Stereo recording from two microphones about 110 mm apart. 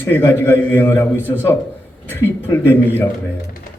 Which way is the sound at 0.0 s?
20° left (ahead or behind).